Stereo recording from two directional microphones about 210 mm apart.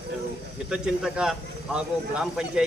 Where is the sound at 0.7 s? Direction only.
5° right (ahead or behind).